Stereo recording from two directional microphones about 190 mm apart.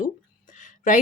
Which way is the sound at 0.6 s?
40° left (ahead or behind).